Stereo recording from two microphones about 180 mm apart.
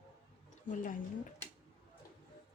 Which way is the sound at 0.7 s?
45° left (ahead or behind).